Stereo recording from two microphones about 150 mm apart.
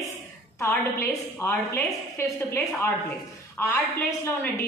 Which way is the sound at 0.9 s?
15° left (ahead or behind).